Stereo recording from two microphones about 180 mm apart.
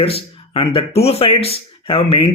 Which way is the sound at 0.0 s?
30° left (ahead or behind).